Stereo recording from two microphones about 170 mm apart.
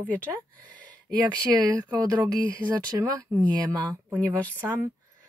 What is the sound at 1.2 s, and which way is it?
Speech, 25° right (ahead or behind).